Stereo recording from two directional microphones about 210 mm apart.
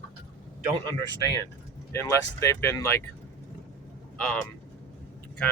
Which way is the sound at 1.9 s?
15° left (ahead or behind).